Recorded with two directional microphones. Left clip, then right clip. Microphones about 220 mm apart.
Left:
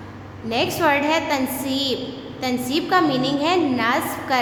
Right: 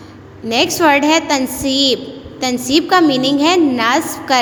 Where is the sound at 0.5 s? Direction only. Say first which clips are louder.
Right 7 dB; 30° right (ahead or behind).